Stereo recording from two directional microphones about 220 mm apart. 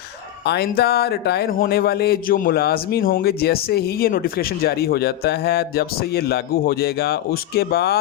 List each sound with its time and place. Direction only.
0.4 s speech: 50° left (ahead or behind)